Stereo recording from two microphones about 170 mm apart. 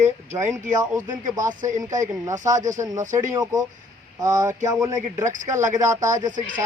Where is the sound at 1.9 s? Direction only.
20° right (ahead or behind).